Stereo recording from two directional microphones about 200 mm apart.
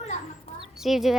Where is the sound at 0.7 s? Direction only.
Centre (ahead or behind).